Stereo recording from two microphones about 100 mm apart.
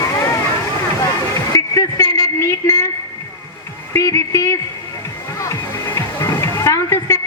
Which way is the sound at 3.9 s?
30° left (ahead or behind).